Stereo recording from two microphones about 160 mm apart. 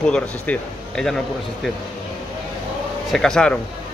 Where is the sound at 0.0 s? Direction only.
5° left (ahead or behind).